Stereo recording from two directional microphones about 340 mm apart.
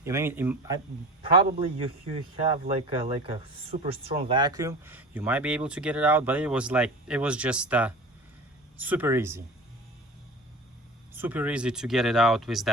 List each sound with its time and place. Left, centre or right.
0.0 s a man's voice: centre
11.1 s speech: centre